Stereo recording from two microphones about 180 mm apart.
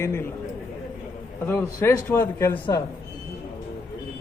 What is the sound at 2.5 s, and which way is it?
Speech, 25° left (ahead or behind).